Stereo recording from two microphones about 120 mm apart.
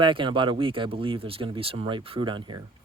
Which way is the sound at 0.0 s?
40° right (ahead or behind).